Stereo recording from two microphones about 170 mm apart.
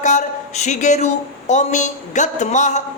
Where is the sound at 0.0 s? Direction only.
45° left (ahead or behind).